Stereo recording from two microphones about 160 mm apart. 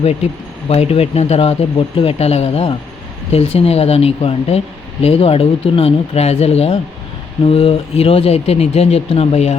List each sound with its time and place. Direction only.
0.7 s speech: 40° left (ahead or behind)